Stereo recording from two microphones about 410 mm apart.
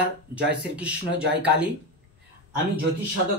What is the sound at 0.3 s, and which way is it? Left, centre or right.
Speech, centre.